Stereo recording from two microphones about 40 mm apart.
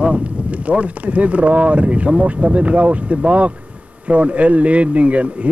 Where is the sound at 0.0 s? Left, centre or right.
Right.